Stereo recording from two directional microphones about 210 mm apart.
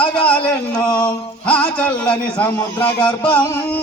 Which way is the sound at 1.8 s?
5° left (ahead or behind).